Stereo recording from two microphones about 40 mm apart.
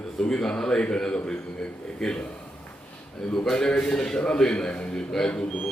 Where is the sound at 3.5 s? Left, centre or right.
Centre.